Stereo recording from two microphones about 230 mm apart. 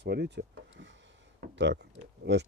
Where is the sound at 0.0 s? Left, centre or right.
Right.